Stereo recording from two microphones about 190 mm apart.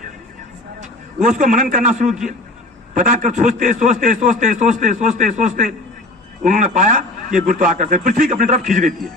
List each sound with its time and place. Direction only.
0.8 s a man's voice: 40° right (ahead or behind)